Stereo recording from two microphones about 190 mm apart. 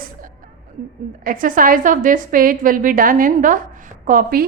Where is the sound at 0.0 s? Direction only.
45° right (ahead or behind).